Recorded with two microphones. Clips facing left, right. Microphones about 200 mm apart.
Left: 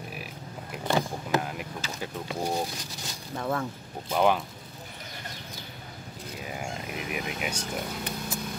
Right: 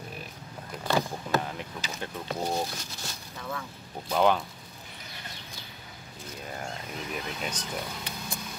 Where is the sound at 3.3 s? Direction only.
50° left (ahead or behind).